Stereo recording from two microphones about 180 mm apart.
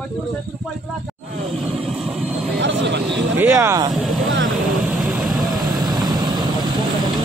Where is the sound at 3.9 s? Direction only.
Centre (ahead or behind).